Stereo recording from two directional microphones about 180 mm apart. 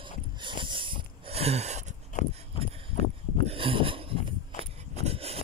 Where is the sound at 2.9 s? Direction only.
40° left (ahead or behind).